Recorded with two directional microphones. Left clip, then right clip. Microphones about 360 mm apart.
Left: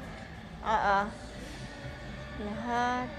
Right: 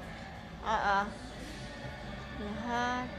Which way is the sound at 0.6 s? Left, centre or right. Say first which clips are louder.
Left 3 dB; centre.